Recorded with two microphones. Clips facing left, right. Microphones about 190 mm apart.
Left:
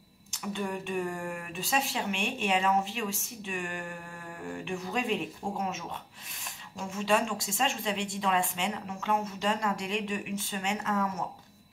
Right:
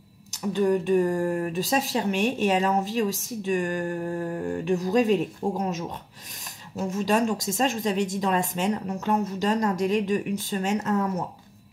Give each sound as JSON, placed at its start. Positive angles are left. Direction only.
{"t": 0.3, "sound": "speech", "side_deg": -40}